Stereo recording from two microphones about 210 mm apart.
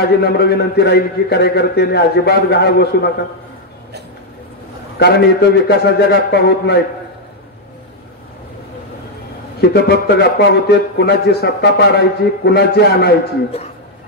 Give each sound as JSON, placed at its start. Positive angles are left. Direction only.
{"t": 0.2, "sound": "a man's voice", "side_deg": 50}
{"t": 4.9, "sound": "a man's voice", "side_deg": 50}
{"t": 9.6, "sound": "a man's voice", "side_deg": 50}